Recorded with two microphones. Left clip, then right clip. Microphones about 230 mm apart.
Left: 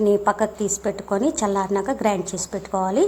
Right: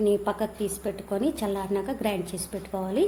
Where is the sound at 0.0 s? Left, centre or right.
Centre.